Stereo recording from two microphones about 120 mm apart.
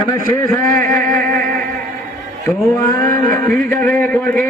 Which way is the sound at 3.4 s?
10° left (ahead or behind).